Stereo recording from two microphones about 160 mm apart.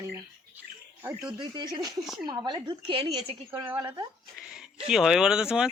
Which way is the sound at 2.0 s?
Centre (ahead or behind).